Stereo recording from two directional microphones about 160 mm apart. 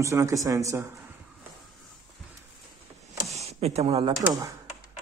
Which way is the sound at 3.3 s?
40° right (ahead or behind).